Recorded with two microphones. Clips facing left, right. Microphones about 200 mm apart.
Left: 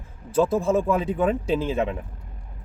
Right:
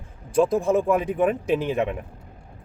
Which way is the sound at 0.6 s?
15° right (ahead or behind).